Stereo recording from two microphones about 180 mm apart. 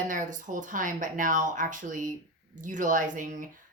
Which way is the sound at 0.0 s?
45° right (ahead or behind).